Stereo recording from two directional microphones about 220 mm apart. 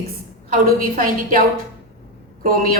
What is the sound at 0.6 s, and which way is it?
Speech, 40° right (ahead or behind).